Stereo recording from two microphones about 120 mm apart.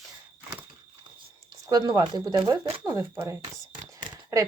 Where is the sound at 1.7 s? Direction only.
35° right (ahead or behind).